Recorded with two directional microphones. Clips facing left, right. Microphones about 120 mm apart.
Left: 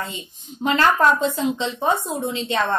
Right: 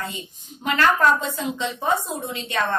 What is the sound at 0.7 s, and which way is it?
A woman's voice, 25° left (ahead or behind).